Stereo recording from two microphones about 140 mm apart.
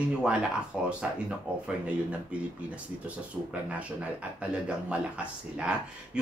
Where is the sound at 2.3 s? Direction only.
10° right (ahead or behind).